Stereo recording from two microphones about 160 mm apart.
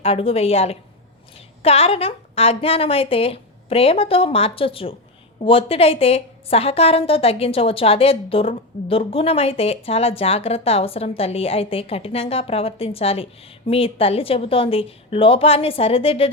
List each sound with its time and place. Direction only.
0.0 s a woman's voice: 35° left (ahead or behind)